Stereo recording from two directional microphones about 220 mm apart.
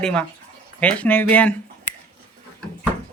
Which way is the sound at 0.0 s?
5° left (ahead or behind).